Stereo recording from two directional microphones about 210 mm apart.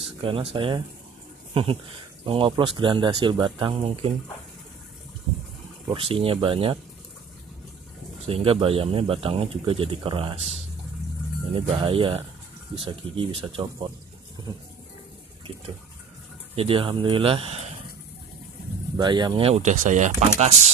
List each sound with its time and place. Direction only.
0.0 s speech: 25° right (ahead or behind)
5.9 s speech: 25° right (ahead or behind)
8.3 s speech: 25° right (ahead or behind)
16.5 s speech: 25° right (ahead or behind)
18.9 s speech: 20° right (ahead or behind)